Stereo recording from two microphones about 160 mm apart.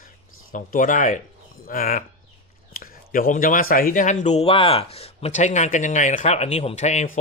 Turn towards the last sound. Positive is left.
turn(degrees=50)  # may be behind; listen again after turning